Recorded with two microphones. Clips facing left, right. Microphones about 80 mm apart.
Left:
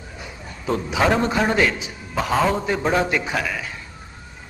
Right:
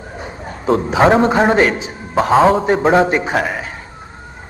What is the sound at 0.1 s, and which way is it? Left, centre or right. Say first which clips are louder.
A man's voice: right 9 dB; right.